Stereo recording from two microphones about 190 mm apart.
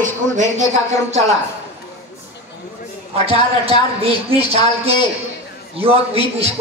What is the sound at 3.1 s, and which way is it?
A man's voice, 30° right (ahead or behind).